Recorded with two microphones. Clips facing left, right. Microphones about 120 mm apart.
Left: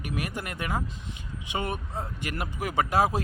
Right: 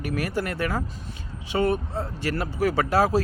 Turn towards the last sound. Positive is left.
turn(degrees=15)  # may be behind; listen again after turning